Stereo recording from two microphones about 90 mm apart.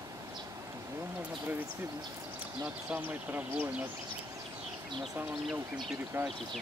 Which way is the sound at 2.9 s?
20° right (ahead or behind).